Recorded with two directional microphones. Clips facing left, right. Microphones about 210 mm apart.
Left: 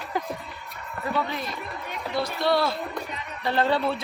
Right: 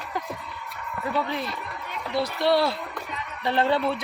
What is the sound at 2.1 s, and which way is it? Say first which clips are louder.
Speech: right 2 dB; 35° right (ahead or behind).